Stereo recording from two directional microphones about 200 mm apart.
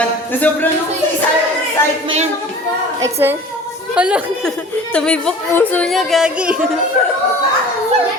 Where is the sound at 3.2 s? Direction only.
10° right (ahead or behind).